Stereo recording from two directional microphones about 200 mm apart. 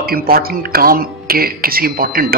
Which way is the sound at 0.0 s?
50° right (ahead or behind).